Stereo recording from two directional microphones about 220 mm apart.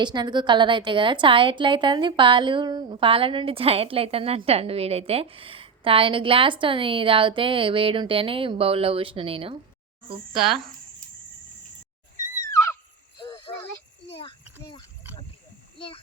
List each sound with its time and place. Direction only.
0.0 s a woman's voice: 20° right (ahead or behind)
10.3 s speech: centre (ahead or behind)
13.2 s a sound: 25° left (ahead or behind)